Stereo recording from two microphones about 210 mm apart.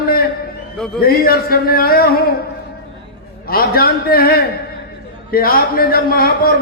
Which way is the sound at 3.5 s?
45° left (ahead or behind).